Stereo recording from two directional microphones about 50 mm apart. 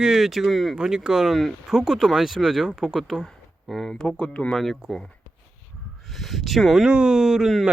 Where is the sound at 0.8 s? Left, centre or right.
Centre.